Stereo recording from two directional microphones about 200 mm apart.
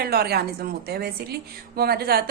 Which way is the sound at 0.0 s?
50° right (ahead or behind).